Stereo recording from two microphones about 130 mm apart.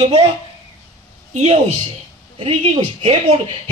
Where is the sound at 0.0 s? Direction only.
50° right (ahead or behind).